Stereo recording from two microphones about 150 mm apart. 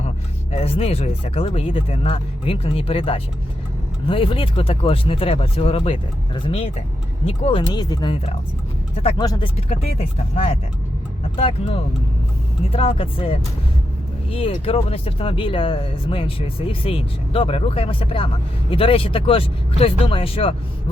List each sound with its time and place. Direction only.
0.5 s speech: 40° left (ahead or behind)
9.1 s speech: 25° left (ahead or behind)
9.6 s speech: 40° left (ahead or behind)